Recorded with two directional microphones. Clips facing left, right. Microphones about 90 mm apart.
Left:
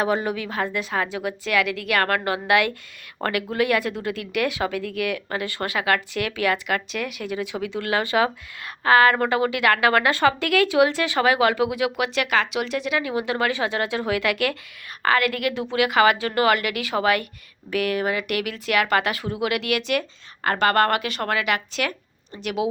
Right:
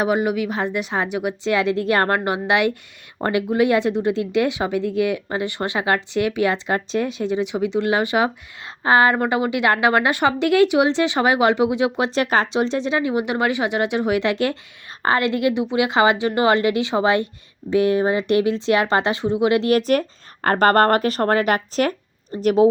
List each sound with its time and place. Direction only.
0.0 s speech: 15° right (ahead or behind); by 22.7 s 40° right (ahead or behind)